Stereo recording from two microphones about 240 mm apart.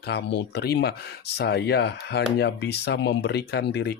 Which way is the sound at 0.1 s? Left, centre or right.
Left.